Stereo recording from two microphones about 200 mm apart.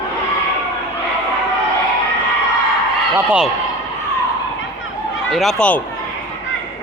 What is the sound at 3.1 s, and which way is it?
Speech, 5° right (ahead or behind).